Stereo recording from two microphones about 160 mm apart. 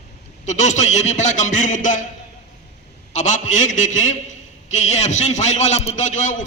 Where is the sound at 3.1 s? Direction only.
50° left (ahead or behind).